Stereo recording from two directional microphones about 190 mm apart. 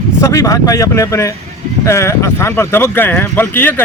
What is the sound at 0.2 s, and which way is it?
Speech, 15° left (ahead or behind).